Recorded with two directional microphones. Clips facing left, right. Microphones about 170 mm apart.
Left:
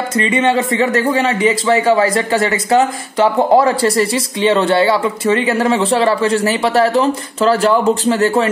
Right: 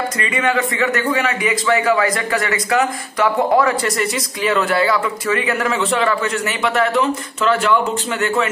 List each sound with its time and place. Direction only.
0.2 s a man's voice: 25° left (ahead or behind)